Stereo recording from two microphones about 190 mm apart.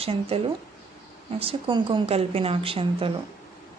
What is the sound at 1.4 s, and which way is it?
Speech, 30° right (ahead or behind).